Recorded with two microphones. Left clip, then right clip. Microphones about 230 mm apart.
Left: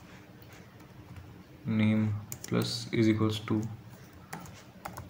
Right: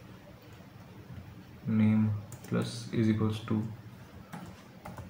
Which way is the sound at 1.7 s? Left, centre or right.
Left.